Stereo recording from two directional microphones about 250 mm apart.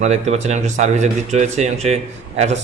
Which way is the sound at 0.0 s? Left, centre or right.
Right.